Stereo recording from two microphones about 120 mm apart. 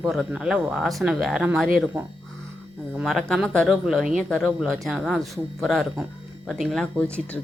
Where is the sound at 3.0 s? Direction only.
Centre (ahead or behind).